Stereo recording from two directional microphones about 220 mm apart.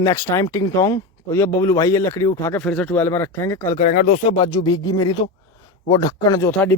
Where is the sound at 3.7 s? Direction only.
40° left (ahead or behind).